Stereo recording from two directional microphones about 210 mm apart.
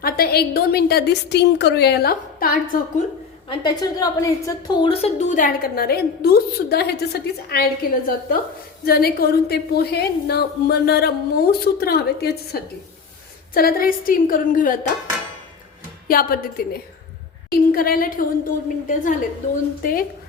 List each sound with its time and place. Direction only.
0.0 s a woman's voice: 45° left (ahead or behind)
3.5 s a woman's voice: 20° left (ahead or behind); by 14.8 s 40° left (ahead or behind)
16.0 s a woman's voice: 45° left (ahead or behind)